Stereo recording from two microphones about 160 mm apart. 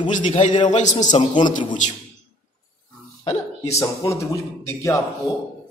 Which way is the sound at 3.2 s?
45° left (ahead or behind).